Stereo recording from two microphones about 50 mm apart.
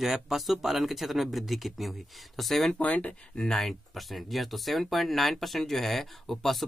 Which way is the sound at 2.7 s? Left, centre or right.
Left.